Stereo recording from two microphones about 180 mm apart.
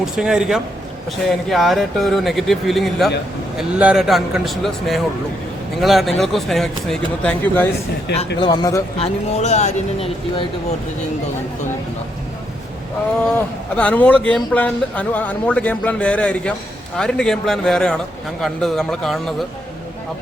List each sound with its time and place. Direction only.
0.0 s a man's voice: 5° right (ahead or behind)
8.4 s speech: 25° left (ahead or behind)
9.0 s speech: 35° left (ahead or behind)
13.3 s a man's voice: 5° left (ahead or behind)